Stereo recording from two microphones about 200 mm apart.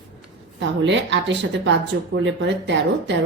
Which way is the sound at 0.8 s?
65° right (ahead or behind).